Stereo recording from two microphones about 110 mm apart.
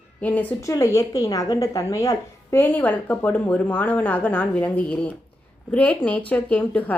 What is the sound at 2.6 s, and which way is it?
A woman's voice, 15° left (ahead or behind).